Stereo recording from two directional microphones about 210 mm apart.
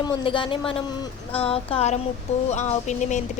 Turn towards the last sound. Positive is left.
turn(degrees=35)  # may be behind; listen again after turning